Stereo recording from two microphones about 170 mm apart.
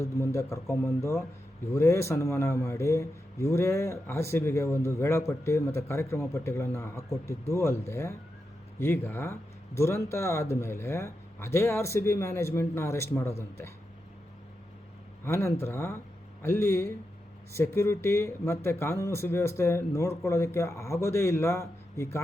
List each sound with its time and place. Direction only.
0.0 s a man's voice: 15° left (ahead or behind)
15.2 s a man's voice: 15° left (ahead or behind)